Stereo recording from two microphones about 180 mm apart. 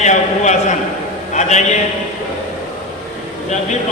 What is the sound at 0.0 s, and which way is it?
A man's voice, 40° left (ahead or behind).